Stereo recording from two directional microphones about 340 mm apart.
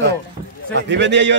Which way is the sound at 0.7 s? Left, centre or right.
Right.